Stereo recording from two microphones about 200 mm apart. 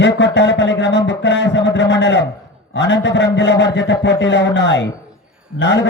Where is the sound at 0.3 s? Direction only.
60° left (ahead or behind).